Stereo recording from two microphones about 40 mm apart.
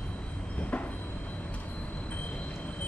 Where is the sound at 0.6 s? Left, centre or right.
Left.